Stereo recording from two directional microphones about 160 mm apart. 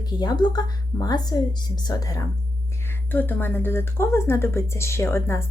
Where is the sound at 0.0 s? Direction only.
25° left (ahead or behind).